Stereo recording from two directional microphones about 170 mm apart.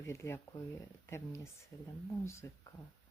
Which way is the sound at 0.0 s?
15° left (ahead or behind).